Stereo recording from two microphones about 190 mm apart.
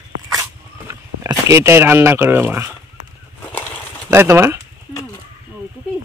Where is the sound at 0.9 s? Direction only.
15° right (ahead or behind).